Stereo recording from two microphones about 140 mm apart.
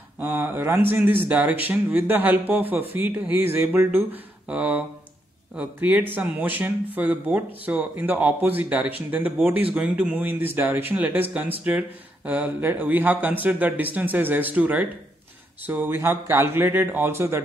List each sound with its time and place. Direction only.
0.2 s speech: 15° right (ahead or behind)